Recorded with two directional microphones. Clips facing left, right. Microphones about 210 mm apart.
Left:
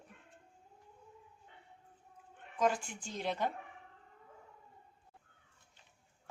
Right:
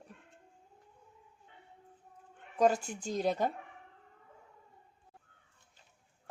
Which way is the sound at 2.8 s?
40° right (ahead or behind).